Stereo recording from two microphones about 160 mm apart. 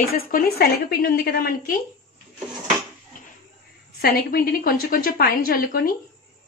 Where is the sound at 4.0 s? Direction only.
65° left (ahead or behind).